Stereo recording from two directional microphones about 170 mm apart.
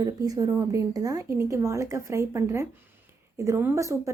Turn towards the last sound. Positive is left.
turn(degrees=-15)  # may be behind; listen again after turning